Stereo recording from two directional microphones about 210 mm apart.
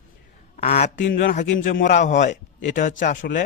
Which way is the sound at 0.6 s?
30° left (ahead or behind).